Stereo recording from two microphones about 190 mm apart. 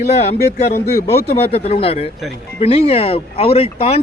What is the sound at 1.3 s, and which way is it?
Speech, 30° left (ahead or behind).